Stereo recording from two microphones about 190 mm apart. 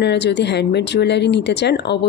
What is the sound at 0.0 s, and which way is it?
Speech, 65° left (ahead or behind).